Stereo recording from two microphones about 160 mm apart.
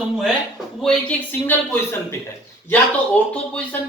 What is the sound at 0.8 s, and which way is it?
A woman's voice, 5° left (ahead or behind).